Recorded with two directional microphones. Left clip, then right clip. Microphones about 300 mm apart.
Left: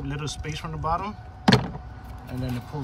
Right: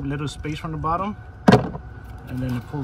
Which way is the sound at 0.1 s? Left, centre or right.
Centre.